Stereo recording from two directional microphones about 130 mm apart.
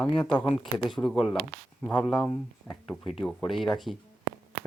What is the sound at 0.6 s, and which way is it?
Speech, 5° left (ahead or behind).